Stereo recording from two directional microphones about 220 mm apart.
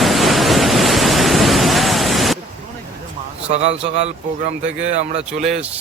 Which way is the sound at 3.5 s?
30° right (ahead or behind).